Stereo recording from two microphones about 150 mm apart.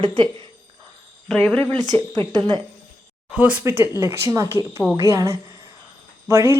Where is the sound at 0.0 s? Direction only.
35° right (ahead or behind).